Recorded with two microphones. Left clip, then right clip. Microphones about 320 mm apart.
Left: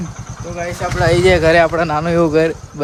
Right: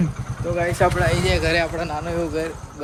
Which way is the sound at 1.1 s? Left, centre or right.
Left.